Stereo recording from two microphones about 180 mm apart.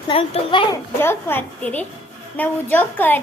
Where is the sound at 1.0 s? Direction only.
15° left (ahead or behind).